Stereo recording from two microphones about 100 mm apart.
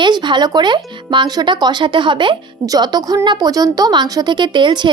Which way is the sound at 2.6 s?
40° right (ahead or behind).